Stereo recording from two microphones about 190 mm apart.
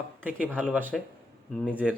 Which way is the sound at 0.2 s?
10° right (ahead or behind).